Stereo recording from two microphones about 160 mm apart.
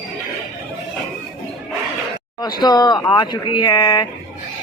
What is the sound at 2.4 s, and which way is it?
Speech, 25° left (ahead or behind).